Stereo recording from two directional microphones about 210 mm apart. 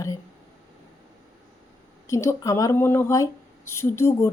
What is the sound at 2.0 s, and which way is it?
Speech, 15° left (ahead or behind).